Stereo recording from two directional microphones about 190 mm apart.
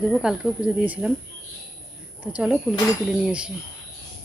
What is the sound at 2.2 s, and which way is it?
A woman's voice, 5° right (ahead or behind).